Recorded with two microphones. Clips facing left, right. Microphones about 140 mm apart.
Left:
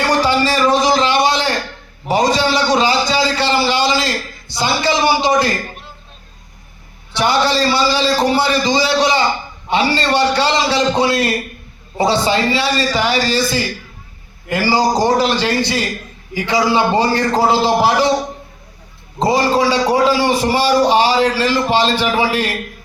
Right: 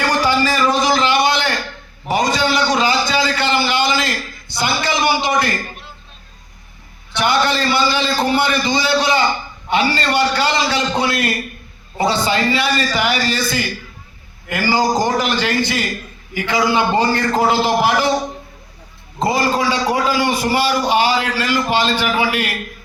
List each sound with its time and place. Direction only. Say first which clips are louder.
0.4 s a sound: left 2 dB; 35° left (ahead or behind)
2.0 s a man's voice: left 2 dB; 35° left (ahead or behind)
7.2 s a man's voice: left 2 dB; 30° left (ahead or behind)
19.2 s a man's voice: left 3 dB; 30° left (ahead or behind)